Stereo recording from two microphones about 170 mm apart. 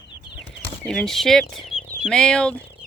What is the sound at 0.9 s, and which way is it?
Speech, 5° left (ahead or behind).